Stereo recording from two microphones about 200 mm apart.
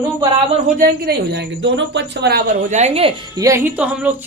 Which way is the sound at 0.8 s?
50° right (ahead or behind).